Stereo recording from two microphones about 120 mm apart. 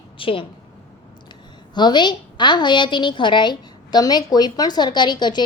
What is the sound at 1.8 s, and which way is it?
A woman's voice, 40° left (ahead or behind).